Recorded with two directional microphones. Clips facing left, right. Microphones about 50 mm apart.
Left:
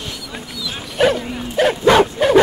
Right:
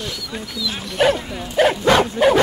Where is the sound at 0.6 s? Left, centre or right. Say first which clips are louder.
Left 1 dB; centre.